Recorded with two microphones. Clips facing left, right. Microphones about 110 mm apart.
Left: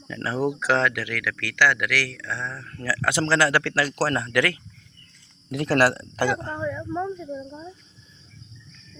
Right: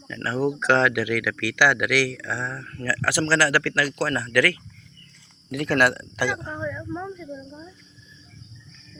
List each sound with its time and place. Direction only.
0.1 s speech: 15° left (ahead or behind); by 0.9 s centre (ahead or behind)
0.9 s speech: 15° right (ahead or behind)
2.8 s speech: 15° left (ahead or behind); by 6.4 s 40° left (ahead or behind)
6.6 s a sound: 20° left (ahead or behind)